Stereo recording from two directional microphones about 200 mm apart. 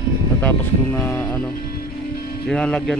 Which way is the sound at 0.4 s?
10° left (ahead or behind).